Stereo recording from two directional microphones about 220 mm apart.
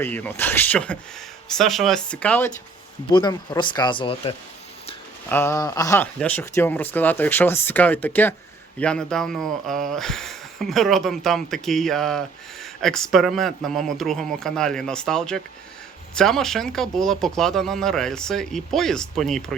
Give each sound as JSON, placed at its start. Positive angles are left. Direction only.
{"t": 0.0, "sound": "speech", "side_deg": 10}
{"t": 3.1, "sound": "speech", "side_deg": 20}
{"t": 5.3, "sound": "speech", "side_deg": 10}